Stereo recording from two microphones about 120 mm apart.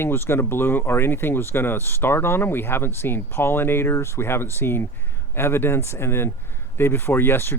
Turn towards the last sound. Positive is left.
turn(degrees=20)  # may be behind; listen again after turning